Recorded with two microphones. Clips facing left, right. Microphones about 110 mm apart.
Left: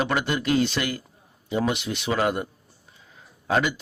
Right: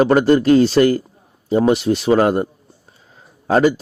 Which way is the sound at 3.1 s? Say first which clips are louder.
Right 7 dB; 40° right (ahead or behind).